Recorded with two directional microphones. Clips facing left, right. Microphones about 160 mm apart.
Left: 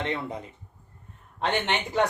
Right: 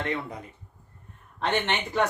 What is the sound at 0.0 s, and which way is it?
Speech, 20° left (ahead or behind).